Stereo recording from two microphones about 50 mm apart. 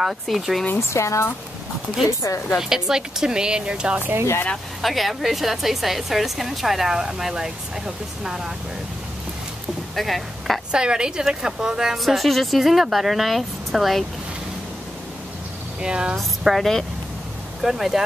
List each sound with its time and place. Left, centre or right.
0.0 s a woman's voice: centre
0.9 s speech: left
2.0 s a woman's voice: left
2.5 s speech: centre
4.8 s a woman's voice: centre
9.9 s speech: centre
10.7 s speech: centre
12.0 s a woman's voice: centre
15.8 s speech: centre
16.2 s a woman's voice: centre